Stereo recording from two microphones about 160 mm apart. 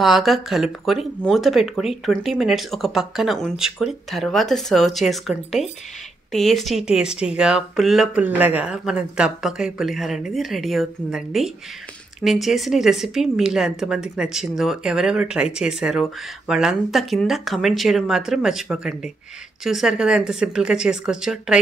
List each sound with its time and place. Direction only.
0.0 s speech: centre (ahead or behind)